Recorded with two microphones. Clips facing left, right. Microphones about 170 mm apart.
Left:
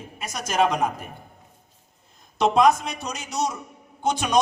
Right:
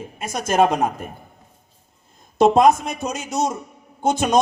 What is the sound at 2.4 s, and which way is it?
A man's voice, 50° right (ahead or behind).